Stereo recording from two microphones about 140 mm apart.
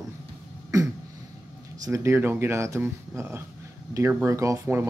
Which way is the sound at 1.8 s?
20° right (ahead or behind).